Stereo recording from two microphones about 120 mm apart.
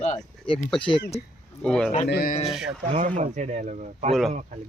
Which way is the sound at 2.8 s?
90° right.